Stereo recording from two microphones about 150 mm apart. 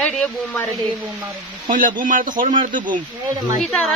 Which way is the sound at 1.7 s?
65° right (ahead or behind).